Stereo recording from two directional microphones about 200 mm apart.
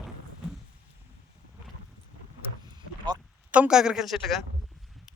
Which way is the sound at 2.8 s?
20° right (ahead or behind).